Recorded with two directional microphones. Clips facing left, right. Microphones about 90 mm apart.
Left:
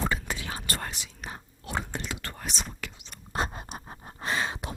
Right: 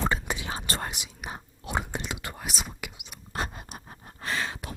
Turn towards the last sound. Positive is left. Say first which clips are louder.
# left 2 dB
turn(degrees=20)  # may be behind; listen again after turning